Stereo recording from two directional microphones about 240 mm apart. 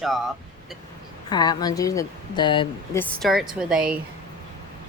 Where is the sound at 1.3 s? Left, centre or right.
Centre.